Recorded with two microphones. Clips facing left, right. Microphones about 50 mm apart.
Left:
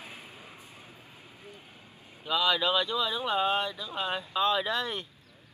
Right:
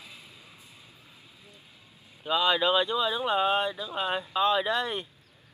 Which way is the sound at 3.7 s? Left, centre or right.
Right.